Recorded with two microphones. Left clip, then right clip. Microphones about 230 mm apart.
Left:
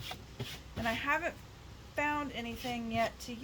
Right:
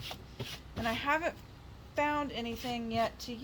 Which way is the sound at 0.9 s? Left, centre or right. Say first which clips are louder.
Right 1 dB; right.